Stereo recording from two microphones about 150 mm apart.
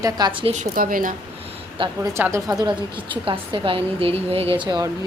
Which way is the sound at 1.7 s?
35° right (ahead or behind).